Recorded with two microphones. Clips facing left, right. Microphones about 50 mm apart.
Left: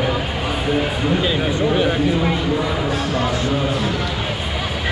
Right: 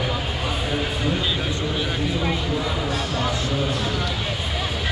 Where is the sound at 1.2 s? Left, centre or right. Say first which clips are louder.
Left 7 dB; left.